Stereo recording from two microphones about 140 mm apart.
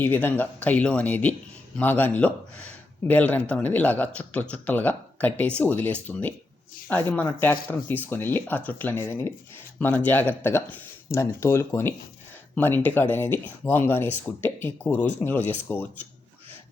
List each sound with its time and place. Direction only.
0.0 s speech: 15° left (ahead or behind)